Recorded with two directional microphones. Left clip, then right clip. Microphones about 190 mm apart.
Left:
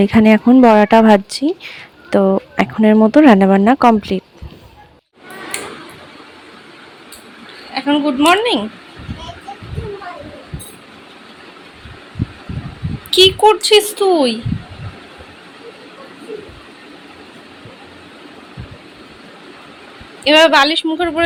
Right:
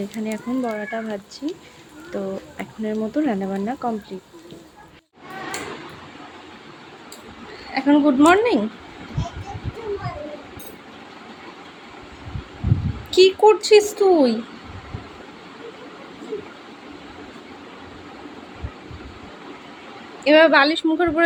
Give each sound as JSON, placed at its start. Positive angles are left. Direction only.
{"t": 0.0, "sound": "speech", "side_deg": 60}
{"t": 7.7, "sound": "speech", "side_deg": -10}
{"t": 13.1, "sound": "a woman's voice", "side_deg": -5}
{"t": 20.2, "sound": "a woman's voice", "side_deg": -5}